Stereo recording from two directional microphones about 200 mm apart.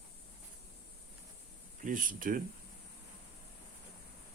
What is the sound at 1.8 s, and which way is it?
Speech, 40° right (ahead or behind).